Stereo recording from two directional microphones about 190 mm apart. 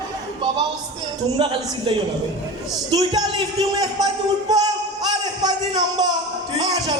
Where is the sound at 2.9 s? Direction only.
20° right (ahead or behind).